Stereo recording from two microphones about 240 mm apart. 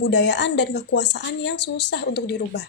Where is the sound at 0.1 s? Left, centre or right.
Left.